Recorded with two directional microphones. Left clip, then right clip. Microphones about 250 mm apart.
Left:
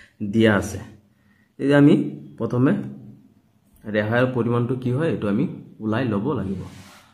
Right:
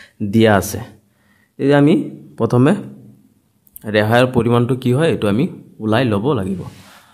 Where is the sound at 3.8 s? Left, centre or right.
Right.